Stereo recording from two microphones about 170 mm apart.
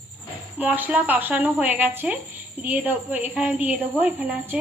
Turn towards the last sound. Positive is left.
turn(degrees=-10)  # may be behind; listen again after turning